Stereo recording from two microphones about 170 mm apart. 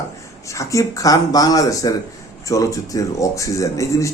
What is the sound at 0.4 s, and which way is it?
A man's voice, 20° left (ahead or behind).